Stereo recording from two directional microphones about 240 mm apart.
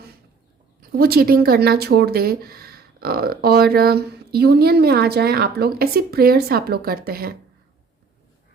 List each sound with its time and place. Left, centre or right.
0.8 s speech: right